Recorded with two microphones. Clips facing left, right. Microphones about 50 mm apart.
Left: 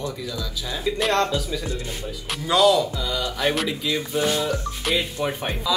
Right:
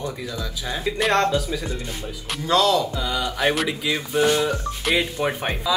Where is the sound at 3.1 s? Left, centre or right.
Centre.